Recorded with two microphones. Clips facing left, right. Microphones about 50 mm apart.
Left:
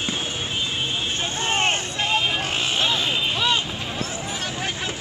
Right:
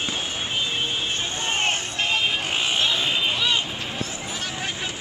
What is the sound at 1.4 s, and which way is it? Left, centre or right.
Vehicle, centre.